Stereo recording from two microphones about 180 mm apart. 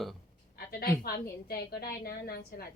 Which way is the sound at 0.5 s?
60° left (ahead or behind).